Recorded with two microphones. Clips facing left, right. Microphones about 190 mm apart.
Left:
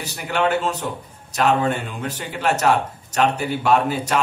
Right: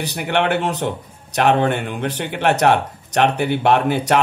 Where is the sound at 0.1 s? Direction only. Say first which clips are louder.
Right 1 dB; 65° right (ahead or behind).